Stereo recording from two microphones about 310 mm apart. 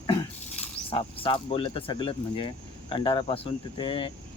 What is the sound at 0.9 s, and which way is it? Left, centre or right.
Speech, centre.